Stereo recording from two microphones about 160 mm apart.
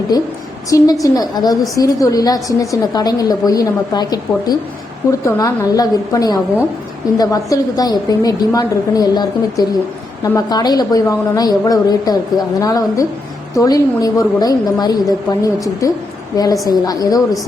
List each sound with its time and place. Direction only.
0.1 s a woman's voice: 25° left (ahead or behind)